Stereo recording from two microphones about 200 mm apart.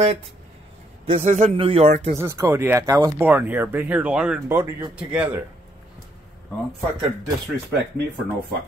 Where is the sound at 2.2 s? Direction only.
15° right (ahead or behind).